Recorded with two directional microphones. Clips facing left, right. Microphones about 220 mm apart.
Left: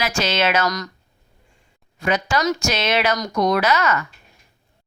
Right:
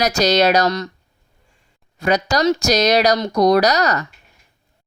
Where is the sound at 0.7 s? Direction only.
25° right (ahead or behind).